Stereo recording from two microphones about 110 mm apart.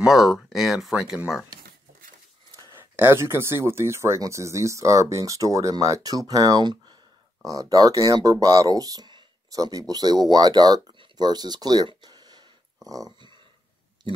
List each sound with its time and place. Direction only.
0.0 s speech: centre (ahead or behind)
2.7 s speech: 20° right (ahead or behind); by 12.4 s 40° right (ahead or behind)
12.8 s a sound: 35° right (ahead or behind)